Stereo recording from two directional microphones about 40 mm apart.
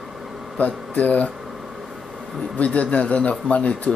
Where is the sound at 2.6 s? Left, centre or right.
Left.